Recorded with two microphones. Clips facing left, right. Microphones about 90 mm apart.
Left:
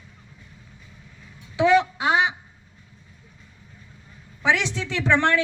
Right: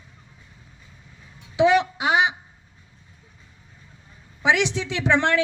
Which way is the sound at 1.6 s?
20° right (ahead or behind).